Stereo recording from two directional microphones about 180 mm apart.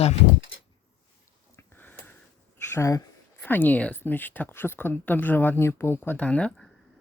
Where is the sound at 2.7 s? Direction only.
15° left (ahead or behind).